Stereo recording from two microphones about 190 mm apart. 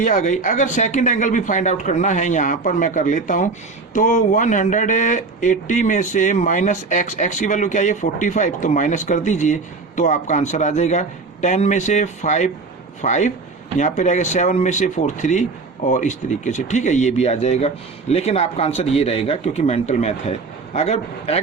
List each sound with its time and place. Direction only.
0.0 s speech: 40° left (ahead or behind)